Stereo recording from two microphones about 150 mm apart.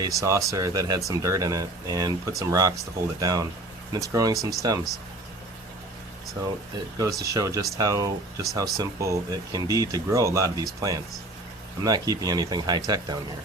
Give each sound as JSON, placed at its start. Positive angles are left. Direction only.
{"t": 0.0, "sound": "speech", "side_deg": -20}
{"t": 7.2, "sound": "speech", "side_deg": -20}